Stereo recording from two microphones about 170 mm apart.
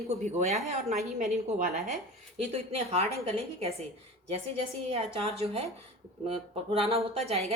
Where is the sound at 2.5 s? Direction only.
35° right (ahead or behind).